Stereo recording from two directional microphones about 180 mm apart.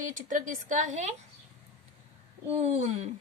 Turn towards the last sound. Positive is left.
turn(degrees=-40)  # may be behind; listen again after turning